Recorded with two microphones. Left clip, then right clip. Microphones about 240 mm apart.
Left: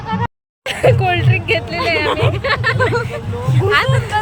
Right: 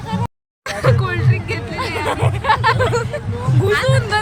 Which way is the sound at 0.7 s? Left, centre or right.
Centre.